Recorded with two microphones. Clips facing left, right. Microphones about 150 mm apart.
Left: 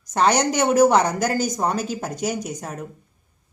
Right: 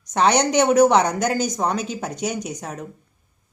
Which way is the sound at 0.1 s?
5° left (ahead or behind).